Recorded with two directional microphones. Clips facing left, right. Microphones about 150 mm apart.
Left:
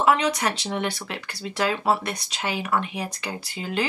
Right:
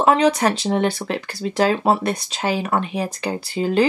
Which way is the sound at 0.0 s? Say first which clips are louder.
Right 5 dB; 30° right (ahead or behind).